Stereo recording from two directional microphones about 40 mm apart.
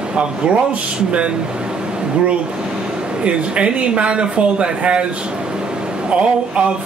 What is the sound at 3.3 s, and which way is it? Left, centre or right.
Speech, right.